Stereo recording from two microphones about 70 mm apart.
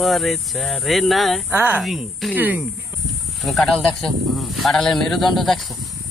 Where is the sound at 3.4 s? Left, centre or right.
Centre.